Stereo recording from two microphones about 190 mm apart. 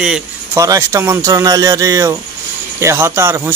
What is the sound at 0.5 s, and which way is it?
Speech, 15° right (ahead or behind).